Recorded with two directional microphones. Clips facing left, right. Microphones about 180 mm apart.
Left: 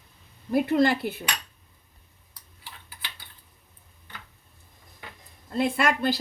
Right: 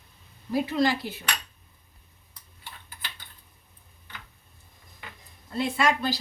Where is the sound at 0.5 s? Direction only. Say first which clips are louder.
Left 3 dB; 55° left (ahead or behind).